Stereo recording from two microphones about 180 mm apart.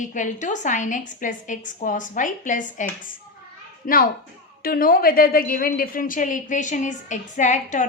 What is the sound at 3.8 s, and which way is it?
A woman's voice, 55° left (ahead or behind).